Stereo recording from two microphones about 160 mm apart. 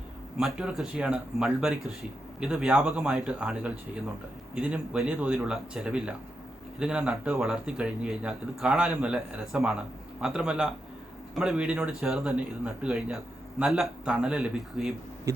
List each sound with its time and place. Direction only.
0.3 s speech: 5° right (ahead or behind)